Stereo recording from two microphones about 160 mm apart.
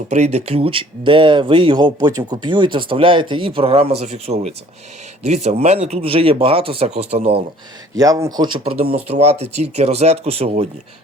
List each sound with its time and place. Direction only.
0.1 s speech: 45° right (ahead or behind)
7.9 s speech: 20° right (ahead or behind); by 10.7 s 40° right (ahead or behind)